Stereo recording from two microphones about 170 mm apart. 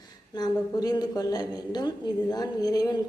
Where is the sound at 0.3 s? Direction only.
25° left (ahead or behind).